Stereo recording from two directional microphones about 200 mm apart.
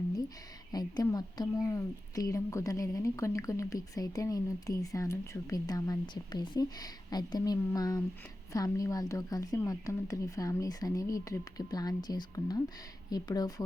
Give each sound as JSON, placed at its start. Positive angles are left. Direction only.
{"t": 0.7, "sound": "a woman's voice", "side_deg": 20}